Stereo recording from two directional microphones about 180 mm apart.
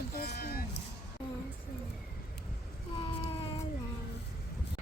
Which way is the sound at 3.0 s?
30° left (ahead or behind).